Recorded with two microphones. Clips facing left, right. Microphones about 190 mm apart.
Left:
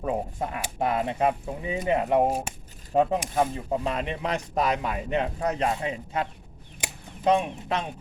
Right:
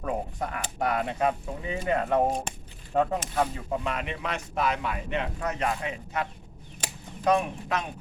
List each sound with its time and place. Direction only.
0.0 s speech: 20° left (ahead or behind)
3.8 s speech: 35° left (ahead or behind)
7.3 s speech: 25° left (ahead or behind)